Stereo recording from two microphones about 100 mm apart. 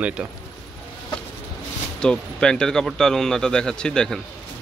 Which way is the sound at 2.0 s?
5° left (ahead or behind).